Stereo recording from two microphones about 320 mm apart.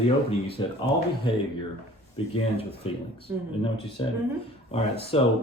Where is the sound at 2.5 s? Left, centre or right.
Centre.